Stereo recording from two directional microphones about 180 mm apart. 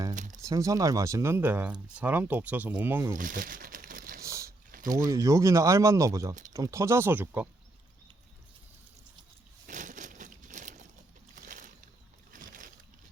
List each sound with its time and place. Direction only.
0.1 s crumpling: 45° right (ahead or behind)
0.4 s speech: 20° right (ahead or behind)
3.2 s crumpling: 50° right (ahead or behind)
4.2 s a sound: 15° right (ahead or behind)
4.9 s speech: 20° right (ahead or behind)
9.6 s crumpling: 45° right (ahead or behind)
11.3 s boat: 45° right (ahead or behind)
12.3 s a sound: 50° right (ahead or behind)